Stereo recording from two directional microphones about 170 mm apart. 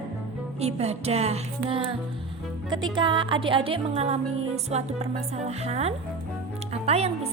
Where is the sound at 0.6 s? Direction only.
40° right (ahead or behind).